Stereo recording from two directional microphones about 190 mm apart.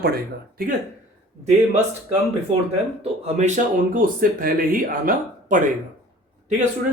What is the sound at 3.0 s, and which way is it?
Speech, 40° right (ahead or behind).